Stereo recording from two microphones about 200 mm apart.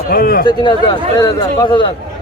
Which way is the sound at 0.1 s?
50° left (ahead or behind).